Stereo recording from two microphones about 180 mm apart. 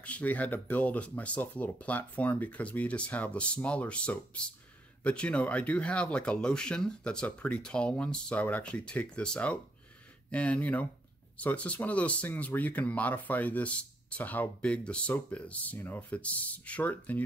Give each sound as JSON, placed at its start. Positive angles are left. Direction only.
{"t": 0.0, "sound": "speech", "side_deg": 10}